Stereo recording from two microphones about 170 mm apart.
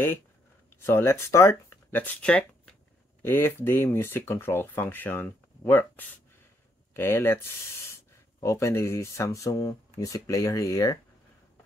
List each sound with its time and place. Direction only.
0.8 s speech: 15° left (ahead or behind)